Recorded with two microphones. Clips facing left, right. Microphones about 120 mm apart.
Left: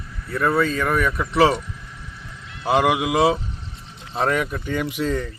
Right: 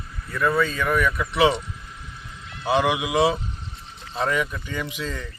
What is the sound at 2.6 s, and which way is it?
Speech, 50° left (ahead or behind).